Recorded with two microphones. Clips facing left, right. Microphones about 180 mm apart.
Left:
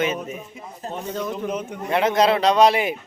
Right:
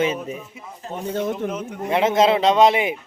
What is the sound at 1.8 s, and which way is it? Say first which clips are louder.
A man's voice: right 1 dB; 20° right (ahead or behind).